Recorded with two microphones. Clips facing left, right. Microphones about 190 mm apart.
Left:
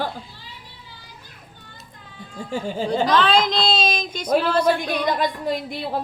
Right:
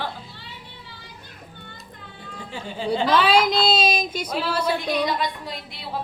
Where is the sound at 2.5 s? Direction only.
45° left (ahead or behind).